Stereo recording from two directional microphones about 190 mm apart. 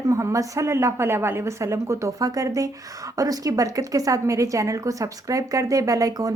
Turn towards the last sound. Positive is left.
turn(degrees=-20)  # may be behind; listen again after turning